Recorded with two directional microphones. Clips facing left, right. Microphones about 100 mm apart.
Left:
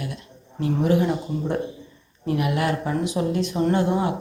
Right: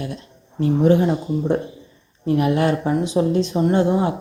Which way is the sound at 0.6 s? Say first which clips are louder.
Right 5 dB; 30° right (ahead or behind).